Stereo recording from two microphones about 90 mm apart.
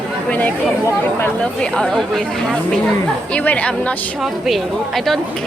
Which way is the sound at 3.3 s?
15° left (ahead or behind).